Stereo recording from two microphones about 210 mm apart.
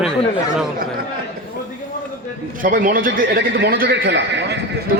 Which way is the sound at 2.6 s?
40° right (ahead or behind).